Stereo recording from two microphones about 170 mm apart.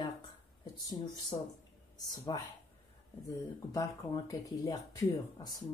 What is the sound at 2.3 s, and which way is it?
Speech, 25° left (ahead or behind).